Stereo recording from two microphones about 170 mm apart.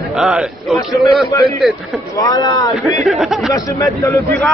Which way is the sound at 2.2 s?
25° left (ahead or behind).